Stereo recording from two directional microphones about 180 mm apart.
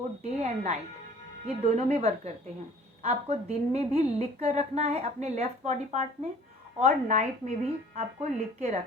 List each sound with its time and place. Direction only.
0.3 s a woman's voice: 35° right (ahead or behind)